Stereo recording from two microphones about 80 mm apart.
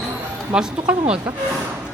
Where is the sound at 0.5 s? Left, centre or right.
Centre.